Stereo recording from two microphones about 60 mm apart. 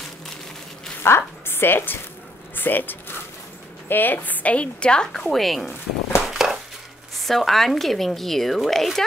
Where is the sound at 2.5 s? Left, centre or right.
Left.